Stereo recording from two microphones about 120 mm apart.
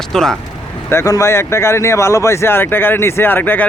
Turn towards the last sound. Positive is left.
turn(degrees=15)  # may be behind; listen again after turning